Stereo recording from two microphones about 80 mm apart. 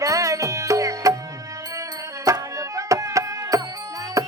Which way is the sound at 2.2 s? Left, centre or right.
Right.